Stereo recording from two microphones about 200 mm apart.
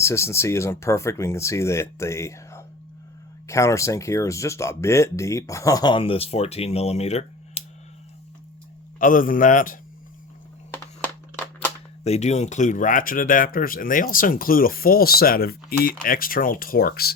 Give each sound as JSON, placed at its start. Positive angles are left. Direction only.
{"t": 0.0, "sound": "speech", "side_deg": 15}
{"t": 9.0, "sound": "a man's voice", "side_deg": 40}
{"t": 10.7, "sound": "a sound", "side_deg": 10}
{"t": 12.0, "sound": "speech", "side_deg": 35}